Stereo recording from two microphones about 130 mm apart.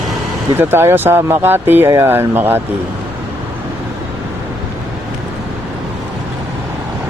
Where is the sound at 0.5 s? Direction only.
20° right (ahead or behind).